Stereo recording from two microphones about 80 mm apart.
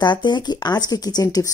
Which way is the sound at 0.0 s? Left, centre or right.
Left.